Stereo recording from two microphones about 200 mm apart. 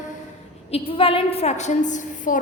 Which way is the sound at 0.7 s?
25° left (ahead or behind).